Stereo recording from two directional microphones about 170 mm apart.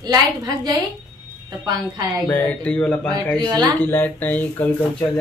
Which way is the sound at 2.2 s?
10° left (ahead or behind).